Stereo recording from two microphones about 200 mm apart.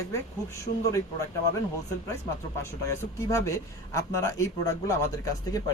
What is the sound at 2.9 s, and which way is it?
A man's voice, 15° left (ahead or behind).